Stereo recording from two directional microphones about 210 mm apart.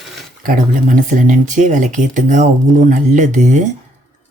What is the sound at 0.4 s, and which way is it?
Speech, 40° right (ahead or behind).